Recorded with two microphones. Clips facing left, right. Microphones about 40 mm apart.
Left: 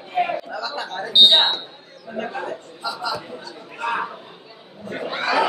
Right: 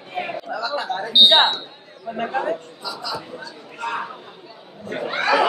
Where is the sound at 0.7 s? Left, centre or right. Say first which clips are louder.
Right 5 dB; centre.